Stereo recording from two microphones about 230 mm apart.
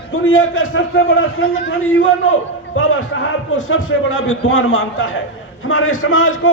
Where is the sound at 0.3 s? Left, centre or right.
Left.